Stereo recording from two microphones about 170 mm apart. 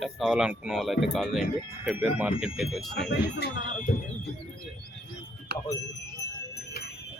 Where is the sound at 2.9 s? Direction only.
80° left.